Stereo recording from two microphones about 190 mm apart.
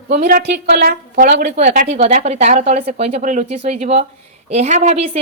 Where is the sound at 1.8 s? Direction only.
35° right (ahead or behind).